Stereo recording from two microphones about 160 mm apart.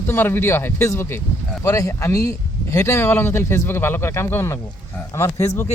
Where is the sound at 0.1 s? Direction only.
15° left (ahead or behind).